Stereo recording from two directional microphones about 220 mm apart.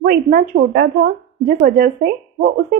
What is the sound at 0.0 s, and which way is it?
A woman's voice, 45° right (ahead or behind).